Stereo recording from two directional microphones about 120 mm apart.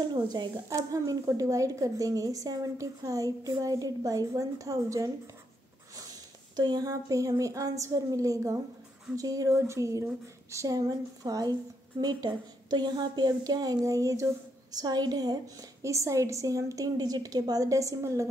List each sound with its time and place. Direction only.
0.1 s a woman's voice: 40° right (ahead or behind)
0.7 s a woman's voice: 30° right (ahead or behind)
6.5 s a woman's voice: 35° right (ahead or behind)